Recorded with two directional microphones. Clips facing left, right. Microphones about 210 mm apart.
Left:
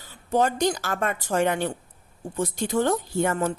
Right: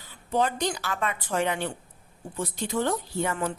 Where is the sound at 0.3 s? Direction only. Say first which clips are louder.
Left 4 dB; 45° left (ahead or behind).